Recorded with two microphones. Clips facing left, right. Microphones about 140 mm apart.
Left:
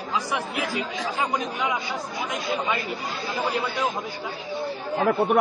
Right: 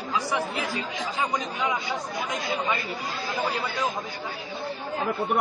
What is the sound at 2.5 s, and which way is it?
Speech, centre (ahead or behind).